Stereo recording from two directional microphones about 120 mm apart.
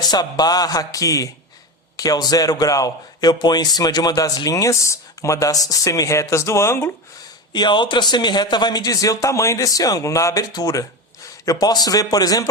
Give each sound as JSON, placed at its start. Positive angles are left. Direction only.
{"t": 0.0, "sound": "a man's voice", "side_deg": 35}
{"t": 7.5, "sound": "a man's voice", "side_deg": 40}